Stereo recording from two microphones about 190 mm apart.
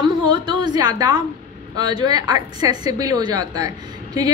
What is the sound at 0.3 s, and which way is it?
A woman's voice, 20° right (ahead or behind).